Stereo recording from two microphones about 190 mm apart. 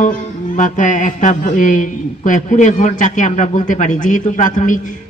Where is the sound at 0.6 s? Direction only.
40° left (ahead or behind).